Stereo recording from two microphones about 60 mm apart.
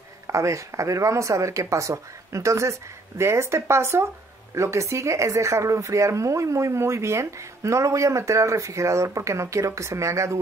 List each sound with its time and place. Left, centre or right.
0.3 s a woman's voice: right